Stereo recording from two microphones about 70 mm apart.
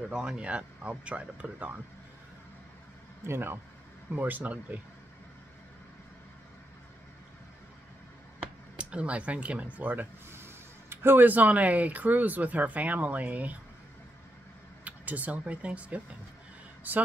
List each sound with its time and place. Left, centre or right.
0.1 s speech: centre
3.3 s speech: right
8.7 s speech: centre
10.3 s speech: right
14.9 s speech: right